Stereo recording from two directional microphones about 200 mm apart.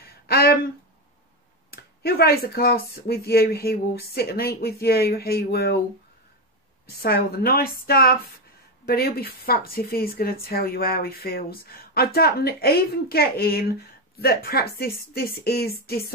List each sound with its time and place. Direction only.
0.3 s speech: 50° left (ahead or behind)
1.7 s speech: 50° left (ahead or behind)
7.0 s speech: 50° left (ahead or behind)